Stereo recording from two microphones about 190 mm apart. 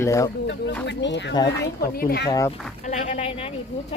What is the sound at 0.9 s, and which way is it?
Speech, 70° left (ahead or behind).